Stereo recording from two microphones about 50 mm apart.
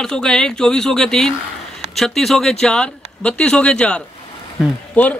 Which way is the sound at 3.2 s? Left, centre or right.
Left.